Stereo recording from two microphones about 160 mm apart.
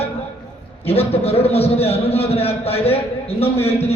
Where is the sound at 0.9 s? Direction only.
40° left (ahead or behind).